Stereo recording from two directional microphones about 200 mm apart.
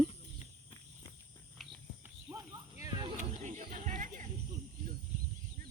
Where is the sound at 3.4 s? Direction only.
40° right (ahead or behind).